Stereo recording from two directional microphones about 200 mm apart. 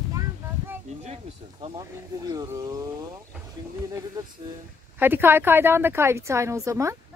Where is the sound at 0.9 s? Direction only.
35° right (ahead or behind).